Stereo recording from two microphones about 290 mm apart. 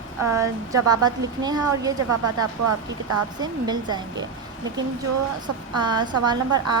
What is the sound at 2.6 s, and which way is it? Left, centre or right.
Speech, right.